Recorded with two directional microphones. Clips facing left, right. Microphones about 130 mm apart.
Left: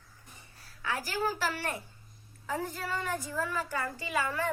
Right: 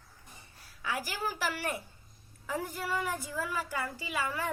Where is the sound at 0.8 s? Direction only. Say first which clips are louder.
Left 3 dB; 10° right (ahead or behind).